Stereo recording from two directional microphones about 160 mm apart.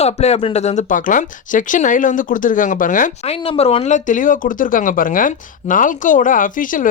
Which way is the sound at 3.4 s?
40° left (ahead or behind).